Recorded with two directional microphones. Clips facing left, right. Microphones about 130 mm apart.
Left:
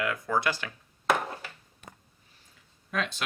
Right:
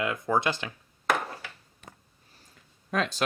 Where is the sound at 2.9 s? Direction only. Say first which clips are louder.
Right 4 dB; 40° right (ahead or behind).